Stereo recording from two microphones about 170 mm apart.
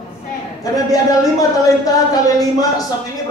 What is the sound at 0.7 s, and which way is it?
Speech, 20° left (ahead or behind).